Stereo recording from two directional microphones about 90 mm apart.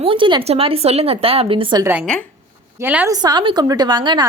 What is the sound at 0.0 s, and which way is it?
Speech, 70° right (ahead or behind).